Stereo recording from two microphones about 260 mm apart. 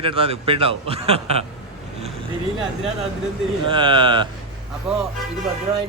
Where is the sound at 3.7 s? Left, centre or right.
Centre.